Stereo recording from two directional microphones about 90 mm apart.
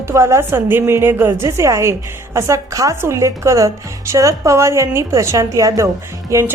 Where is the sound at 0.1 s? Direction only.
30° right (ahead or behind).